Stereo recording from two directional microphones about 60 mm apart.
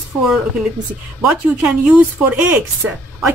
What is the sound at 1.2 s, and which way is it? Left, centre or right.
A woman's voice, right.